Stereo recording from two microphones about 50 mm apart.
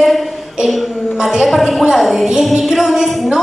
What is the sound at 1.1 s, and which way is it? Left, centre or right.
A woman's voice, centre.